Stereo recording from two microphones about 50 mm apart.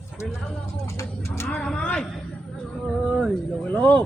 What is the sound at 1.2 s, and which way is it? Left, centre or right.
Speech, left.